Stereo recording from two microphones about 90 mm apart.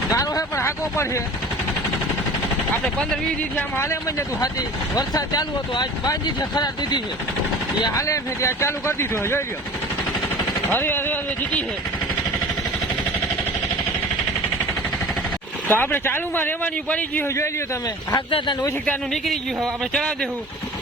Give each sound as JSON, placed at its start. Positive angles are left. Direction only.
{"t": 0.1, "sound": "speech", "side_deg": 40}
{"t": 4.9, "sound": "speech", "side_deg": 45}
{"t": 7.9, "sound": "speech", "side_deg": 35}
{"t": 10.7, "sound": "speech", "side_deg": 25}
{"t": 15.7, "sound": "speech", "side_deg": 25}
{"t": 18.3, "sound": "speech", "side_deg": 85}
{"t": 19.9, "sound": "speech", "side_deg": 10}